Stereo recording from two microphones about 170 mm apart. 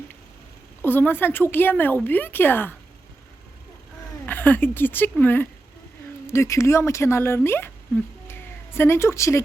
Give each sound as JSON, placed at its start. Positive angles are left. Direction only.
{"t": 0.8, "sound": "a woman's voice", "side_deg": 10}
{"t": 4.3, "sound": "a woman's voice", "side_deg": 10}
{"t": 8.3, "sound": "a sound", "side_deg": 15}